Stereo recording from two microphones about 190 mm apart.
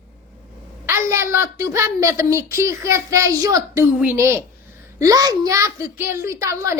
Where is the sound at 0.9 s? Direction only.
15° right (ahead or behind).